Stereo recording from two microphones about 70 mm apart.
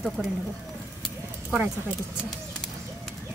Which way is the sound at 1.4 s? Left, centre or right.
Centre.